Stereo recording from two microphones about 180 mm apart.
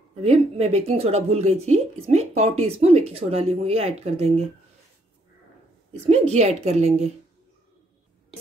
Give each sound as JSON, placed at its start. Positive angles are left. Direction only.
{"t": 0.2, "sound": "a woman's voice", "side_deg": -35}
{"t": 6.0, "sound": "a woman's voice", "side_deg": -35}